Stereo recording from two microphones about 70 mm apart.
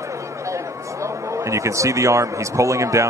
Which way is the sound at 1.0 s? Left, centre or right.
Right.